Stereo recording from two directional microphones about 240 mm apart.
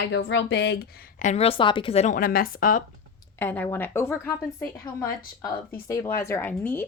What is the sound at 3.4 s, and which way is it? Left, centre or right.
A woman's voice, centre.